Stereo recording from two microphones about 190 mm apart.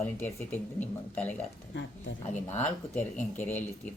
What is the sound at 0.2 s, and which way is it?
Speech, 10° left (ahead or behind).